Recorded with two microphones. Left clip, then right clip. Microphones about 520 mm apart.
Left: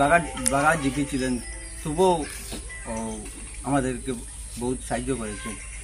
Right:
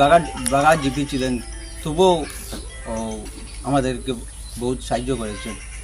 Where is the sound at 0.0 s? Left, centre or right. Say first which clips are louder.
Right 6 dB; left.